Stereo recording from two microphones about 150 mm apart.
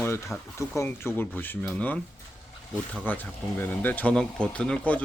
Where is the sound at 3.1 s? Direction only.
10° left (ahead or behind).